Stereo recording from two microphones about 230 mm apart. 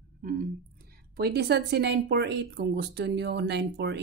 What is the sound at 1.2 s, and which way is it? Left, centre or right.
Speech, right.